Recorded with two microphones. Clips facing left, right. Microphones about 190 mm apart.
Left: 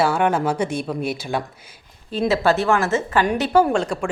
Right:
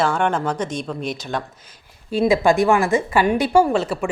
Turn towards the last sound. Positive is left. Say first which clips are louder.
# right 1 dB
turn(degrees=-5)  # may be behind; listen again after turning